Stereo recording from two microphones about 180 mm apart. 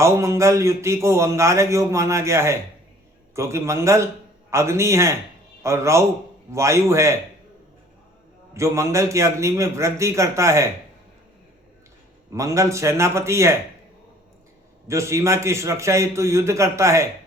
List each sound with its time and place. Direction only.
0.0 s a man's voice: 15° right (ahead or behind)
8.5 s a man's voice: 15° right (ahead or behind)
12.3 s a man's voice: 15° right (ahead or behind)
14.8 s a man's voice: 15° right (ahead or behind)